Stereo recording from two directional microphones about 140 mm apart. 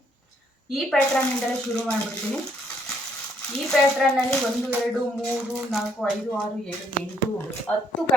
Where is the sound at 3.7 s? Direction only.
5° left (ahead or behind).